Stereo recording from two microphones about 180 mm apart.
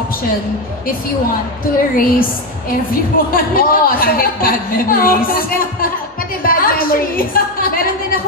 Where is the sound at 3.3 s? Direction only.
50° left (ahead or behind).